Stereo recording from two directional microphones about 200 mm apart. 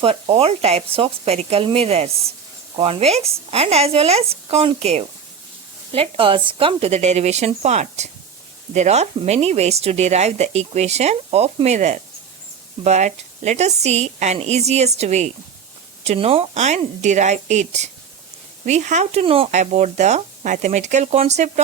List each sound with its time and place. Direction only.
0.0 s speech: 30° right (ahead or behind)